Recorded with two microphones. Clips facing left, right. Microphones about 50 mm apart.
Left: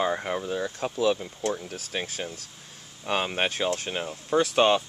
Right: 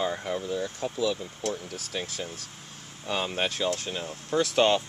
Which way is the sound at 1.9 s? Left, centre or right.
Left.